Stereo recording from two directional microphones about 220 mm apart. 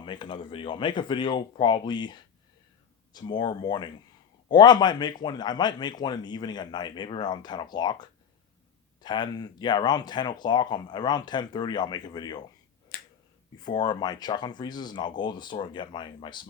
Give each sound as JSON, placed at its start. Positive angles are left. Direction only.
{"t": 0.0, "sound": "speech", "side_deg": 20}
{"t": 12.9, "sound": "finger snapping", "side_deg": 45}
{"t": 13.7, "sound": "speech", "side_deg": 20}